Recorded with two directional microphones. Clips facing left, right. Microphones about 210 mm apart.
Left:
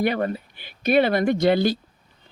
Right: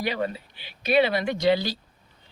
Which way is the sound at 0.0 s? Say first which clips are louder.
Left 5 dB; 55° left (ahead or behind).